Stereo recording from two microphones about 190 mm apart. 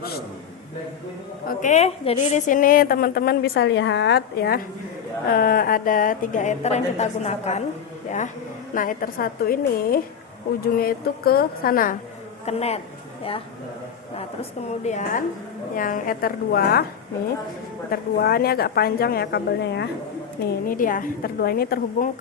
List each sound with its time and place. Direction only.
1.5 s a woman's voice: 40° left (ahead or behind)
8.7 s a woman's voice: 45° left (ahead or behind)
12.5 s a man's voice: 35° left (ahead or behind)
14.8 s a man's voice: 40° left (ahead or behind)
17.9 s a woman's voice: 55° left (ahead or behind)
20.7 s a woman's voice: 45° left (ahead or behind)